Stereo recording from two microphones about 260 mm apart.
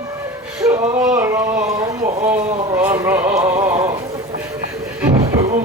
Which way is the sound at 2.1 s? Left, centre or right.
Right.